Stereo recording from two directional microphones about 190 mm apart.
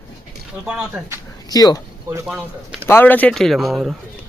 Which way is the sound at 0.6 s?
5° right (ahead or behind).